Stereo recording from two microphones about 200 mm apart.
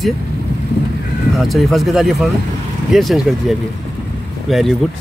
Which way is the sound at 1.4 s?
Centre (ahead or behind).